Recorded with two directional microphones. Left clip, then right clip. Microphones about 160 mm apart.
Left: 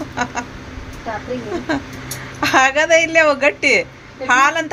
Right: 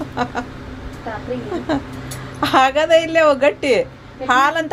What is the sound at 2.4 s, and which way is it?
Speech, 15° right (ahead or behind).